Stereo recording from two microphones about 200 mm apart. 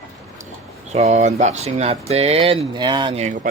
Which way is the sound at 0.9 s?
35° right (ahead or behind).